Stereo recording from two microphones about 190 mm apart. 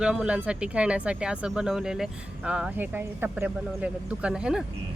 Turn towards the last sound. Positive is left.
turn(degrees=-5)  # may be behind; listen again after turning